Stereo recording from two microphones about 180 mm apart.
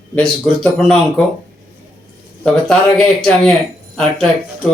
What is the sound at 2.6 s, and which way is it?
Speech, 5° left (ahead or behind).